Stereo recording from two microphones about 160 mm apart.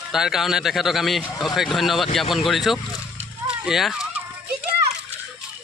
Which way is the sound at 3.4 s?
5° right (ahead or behind).